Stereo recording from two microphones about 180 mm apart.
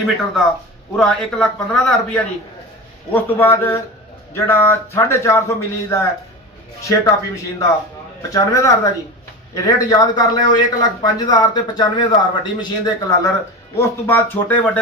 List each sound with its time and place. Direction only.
0.9 s a man's voice: 5° left (ahead or behind); by 13.3 s 25° left (ahead or behind)
13.7 s a man's voice: 10° left (ahead or behind)